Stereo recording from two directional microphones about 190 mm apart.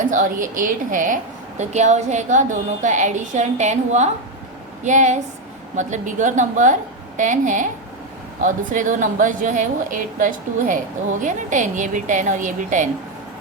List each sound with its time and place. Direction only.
0.0 s a woman's voice: 40° right (ahead or behind)